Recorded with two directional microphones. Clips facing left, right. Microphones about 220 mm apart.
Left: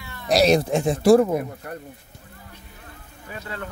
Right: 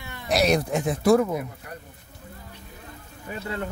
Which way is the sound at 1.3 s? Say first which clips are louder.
Left 5 dB; 50° left (ahead or behind).